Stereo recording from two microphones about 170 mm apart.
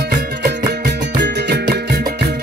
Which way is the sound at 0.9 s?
90° right.